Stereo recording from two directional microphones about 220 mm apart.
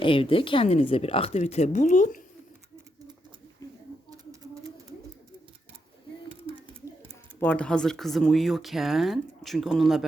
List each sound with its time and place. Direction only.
0.0 s speech: 25° left (ahead or behind)
7.3 s speech: 5° left (ahead or behind)